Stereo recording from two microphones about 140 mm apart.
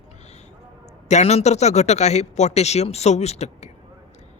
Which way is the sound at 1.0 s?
50° left (ahead or behind).